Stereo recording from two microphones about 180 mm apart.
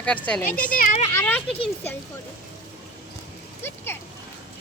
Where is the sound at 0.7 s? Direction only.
45° left (ahead or behind).